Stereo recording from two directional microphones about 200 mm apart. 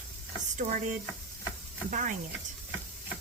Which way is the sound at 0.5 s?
40° right (ahead or behind).